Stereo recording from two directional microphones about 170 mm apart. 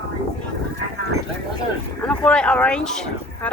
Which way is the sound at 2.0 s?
5° left (ahead or behind).